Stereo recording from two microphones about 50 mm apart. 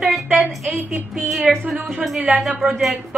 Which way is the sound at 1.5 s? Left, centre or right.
Centre.